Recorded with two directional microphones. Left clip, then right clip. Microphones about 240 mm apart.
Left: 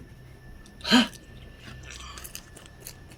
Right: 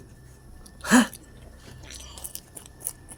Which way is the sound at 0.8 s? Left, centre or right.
Centre.